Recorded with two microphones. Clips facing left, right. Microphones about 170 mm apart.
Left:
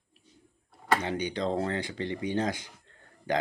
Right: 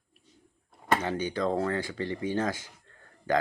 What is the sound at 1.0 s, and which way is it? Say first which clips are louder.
Speech: right 1 dB; 20° left (ahead or behind).